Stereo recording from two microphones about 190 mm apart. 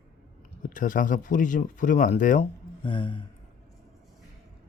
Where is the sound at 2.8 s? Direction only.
25° left (ahead or behind).